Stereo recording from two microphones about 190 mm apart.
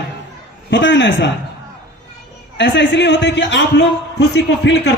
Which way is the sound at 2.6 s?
70° left (ahead or behind).